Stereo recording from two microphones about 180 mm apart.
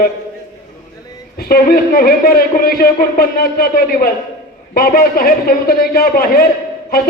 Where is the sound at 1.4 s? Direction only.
55° left (ahead or behind).